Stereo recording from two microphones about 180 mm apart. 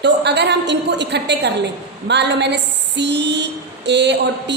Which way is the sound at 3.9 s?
70° right (ahead or behind).